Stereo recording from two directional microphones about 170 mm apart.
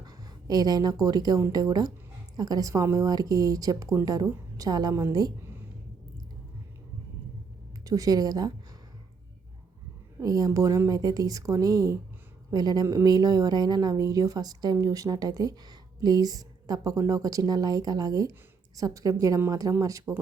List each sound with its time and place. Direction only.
0.0 s a woman's voice: 20° right (ahead or behind)
7.9 s a woman's voice: 20° right (ahead or behind)
10.2 s a woman's voice: 20° right (ahead or behind)